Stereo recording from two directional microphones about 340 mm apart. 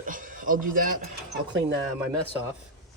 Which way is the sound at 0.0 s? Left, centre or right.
Right.